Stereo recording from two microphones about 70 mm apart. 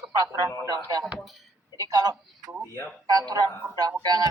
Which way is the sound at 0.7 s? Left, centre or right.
Right.